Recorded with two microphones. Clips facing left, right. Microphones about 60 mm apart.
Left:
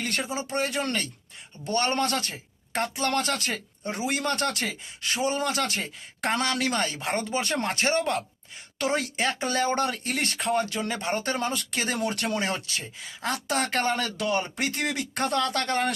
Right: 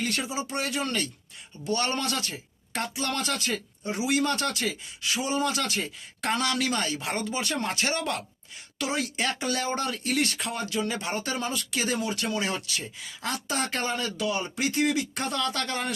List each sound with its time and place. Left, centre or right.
0.0 s speech: left
8.8 s speech: left
9.1 s speech: left
9.6 s speech: left
11.7 s speech: left
11.9 s speech: left
12.4 s speech: left
13.2 s speech: left